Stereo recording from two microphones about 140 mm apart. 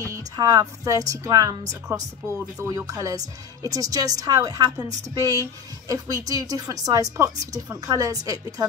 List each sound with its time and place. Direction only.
0.0 s a woman's voice: 25° right (ahead or behind)